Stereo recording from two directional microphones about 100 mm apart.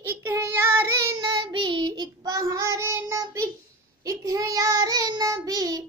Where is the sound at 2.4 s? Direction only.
30° right (ahead or behind).